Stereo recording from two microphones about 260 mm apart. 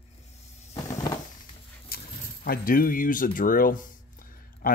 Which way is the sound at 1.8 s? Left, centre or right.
Left.